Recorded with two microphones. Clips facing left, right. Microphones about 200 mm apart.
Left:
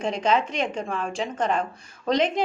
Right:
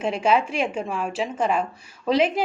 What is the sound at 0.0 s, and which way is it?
A woman's voice, 5° right (ahead or behind).